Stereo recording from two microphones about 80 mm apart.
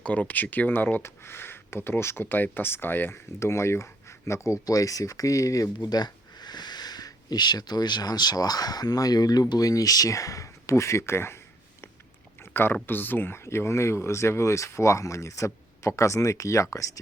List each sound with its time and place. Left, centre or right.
0.0 s speech: centre; by 11.3 s left
12.4 s speech: left